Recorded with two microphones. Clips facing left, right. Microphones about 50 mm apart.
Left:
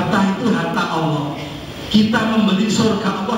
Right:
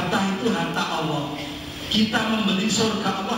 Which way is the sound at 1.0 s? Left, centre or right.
Left.